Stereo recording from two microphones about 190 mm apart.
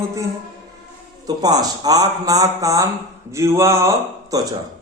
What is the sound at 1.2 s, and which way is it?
A man's voice, 20° right (ahead or behind).